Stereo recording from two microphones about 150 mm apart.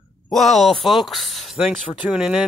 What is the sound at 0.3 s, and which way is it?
Speech, centre (ahead or behind).